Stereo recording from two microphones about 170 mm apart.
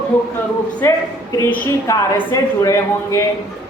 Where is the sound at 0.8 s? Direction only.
15° left (ahead or behind).